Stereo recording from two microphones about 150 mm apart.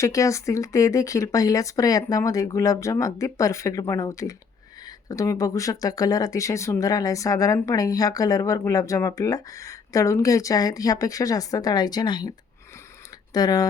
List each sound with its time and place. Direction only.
0.0 s speech: 20° left (ahead or behind)
13.3 s speech: 25° left (ahead or behind)